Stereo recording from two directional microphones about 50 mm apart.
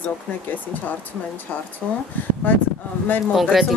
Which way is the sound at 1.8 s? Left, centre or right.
Left.